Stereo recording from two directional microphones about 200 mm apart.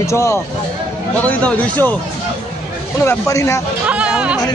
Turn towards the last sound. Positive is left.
turn(degrees=-5)  # may be behind; listen again after turning